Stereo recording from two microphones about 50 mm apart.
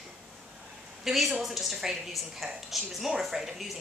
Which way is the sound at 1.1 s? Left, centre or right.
Centre.